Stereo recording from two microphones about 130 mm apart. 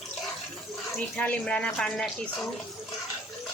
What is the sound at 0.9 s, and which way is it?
Speech, 10° left (ahead or behind).